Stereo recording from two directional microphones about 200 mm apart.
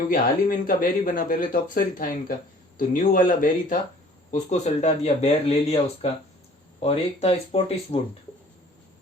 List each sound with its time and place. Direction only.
0.1 s speech: 45° left (ahead or behind); by 7.9 s 30° left (ahead or behind)